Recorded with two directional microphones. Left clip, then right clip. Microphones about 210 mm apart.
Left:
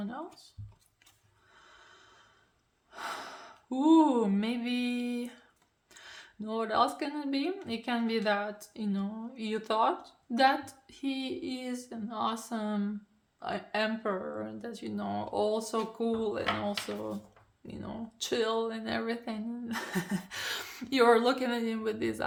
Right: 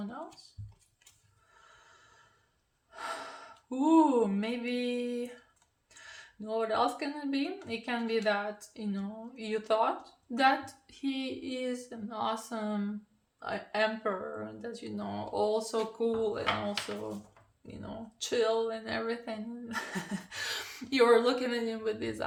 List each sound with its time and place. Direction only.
2.9 s speech: 40° left (ahead or behind)
6.4 s speech: 40° left (ahead or behind)
18.2 s speech: 40° left (ahead or behind)